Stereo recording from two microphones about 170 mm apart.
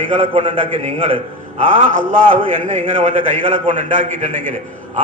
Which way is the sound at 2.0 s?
55° right (ahead or behind).